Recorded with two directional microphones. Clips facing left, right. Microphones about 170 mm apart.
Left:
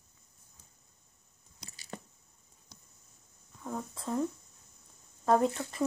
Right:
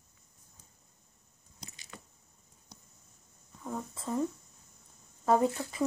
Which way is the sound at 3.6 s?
Centre (ahead or behind).